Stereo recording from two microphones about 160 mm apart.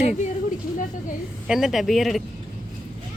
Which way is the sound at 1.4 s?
5° right (ahead or behind).